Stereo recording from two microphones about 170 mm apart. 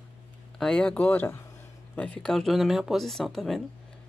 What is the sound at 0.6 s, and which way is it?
Speech, 5° left (ahead or behind).